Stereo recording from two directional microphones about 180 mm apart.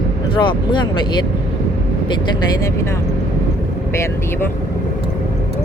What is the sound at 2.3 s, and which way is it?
Speech, 20° left (ahead or behind).